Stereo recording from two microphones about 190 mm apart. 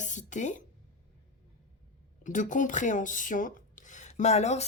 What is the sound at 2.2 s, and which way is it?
Speech, 40° left (ahead or behind).